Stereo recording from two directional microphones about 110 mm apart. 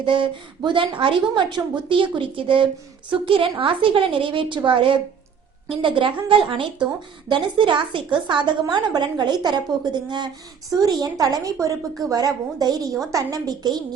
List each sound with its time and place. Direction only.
0.0 s a woman's voice: 50° right (ahead or behind)